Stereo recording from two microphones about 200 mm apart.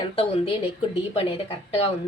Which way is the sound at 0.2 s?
30° left (ahead or behind).